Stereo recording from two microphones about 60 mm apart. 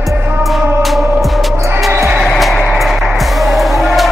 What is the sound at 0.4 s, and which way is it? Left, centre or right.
Music, centre.